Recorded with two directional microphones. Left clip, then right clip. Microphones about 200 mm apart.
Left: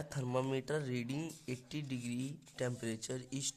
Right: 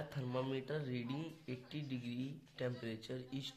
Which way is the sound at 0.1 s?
45° left (ahead or behind).